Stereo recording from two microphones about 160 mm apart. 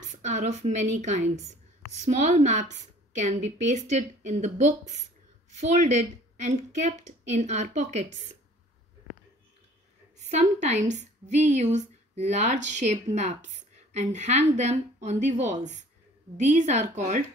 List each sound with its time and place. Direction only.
0.2 s a woman's voice: 45° right (ahead or behind)
10.1 s a woman's voice: 45° right (ahead or behind)